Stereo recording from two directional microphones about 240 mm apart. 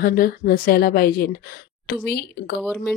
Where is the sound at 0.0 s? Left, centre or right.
Left.